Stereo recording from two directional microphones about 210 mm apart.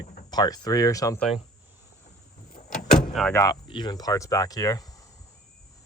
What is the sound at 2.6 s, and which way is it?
Vehicle, 35° left (ahead or behind).